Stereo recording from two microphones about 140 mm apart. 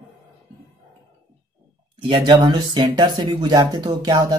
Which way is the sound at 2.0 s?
35° right (ahead or behind).